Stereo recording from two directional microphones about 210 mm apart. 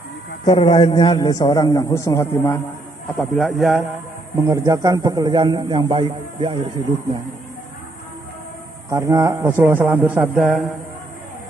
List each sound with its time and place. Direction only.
0.4 s a man's voice: 25° left (ahead or behind)
3.3 s a man's voice: centre (ahead or behind)
4.4 s a man's voice: 15° right (ahead or behind)
8.9 s speech: 15° right (ahead or behind)